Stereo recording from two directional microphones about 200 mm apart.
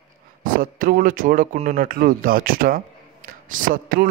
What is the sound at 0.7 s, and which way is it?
A man's voice, 45° right (ahead or behind).